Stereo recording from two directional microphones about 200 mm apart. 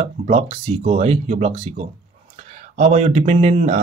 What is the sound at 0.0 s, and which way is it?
Speech, 30° right (ahead or behind).